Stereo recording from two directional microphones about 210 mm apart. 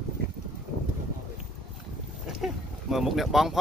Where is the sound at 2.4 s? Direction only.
Centre (ahead or behind).